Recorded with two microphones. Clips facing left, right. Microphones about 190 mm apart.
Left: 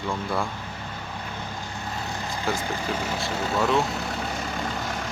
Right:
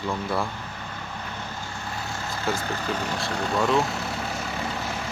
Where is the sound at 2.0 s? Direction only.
15° left (ahead or behind).